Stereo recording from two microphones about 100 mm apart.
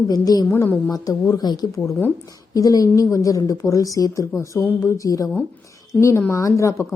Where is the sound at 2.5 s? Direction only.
35° left (ahead or behind).